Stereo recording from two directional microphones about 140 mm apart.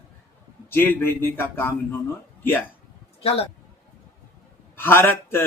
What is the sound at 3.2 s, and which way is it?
Speech, 45° left (ahead or behind).